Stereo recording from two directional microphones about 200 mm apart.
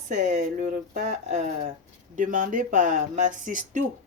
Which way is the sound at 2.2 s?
40° right (ahead or behind).